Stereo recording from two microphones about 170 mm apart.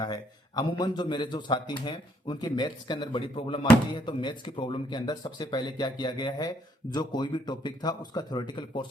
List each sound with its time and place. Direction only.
0.0 s a man's voice: 25° left (ahead or behind)